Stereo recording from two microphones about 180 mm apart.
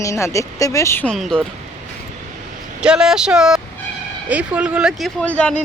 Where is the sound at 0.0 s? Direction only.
15° left (ahead or behind); by 1.5 s centre (ahead or behind).